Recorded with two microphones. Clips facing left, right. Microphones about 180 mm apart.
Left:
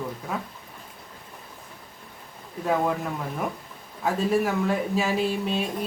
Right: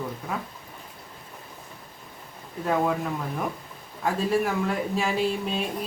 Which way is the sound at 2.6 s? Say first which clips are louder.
Even; centre (ahead or behind).